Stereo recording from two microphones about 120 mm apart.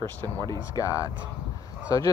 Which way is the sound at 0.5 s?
25° left (ahead or behind).